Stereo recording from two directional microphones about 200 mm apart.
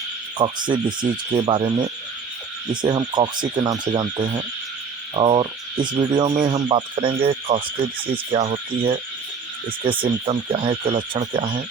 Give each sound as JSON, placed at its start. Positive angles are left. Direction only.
{"t": 0.3, "sound": "speech", "side_deg": -25}